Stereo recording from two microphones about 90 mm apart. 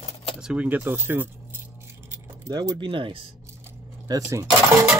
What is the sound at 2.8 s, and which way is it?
Speech, 70° right (ahead or behind).